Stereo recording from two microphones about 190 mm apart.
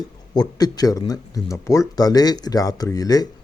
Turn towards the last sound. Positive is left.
turn(degrees=20)  # may be behind; listen again after turning